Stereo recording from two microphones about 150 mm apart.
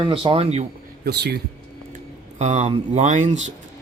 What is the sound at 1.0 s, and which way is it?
Speech, 90° right.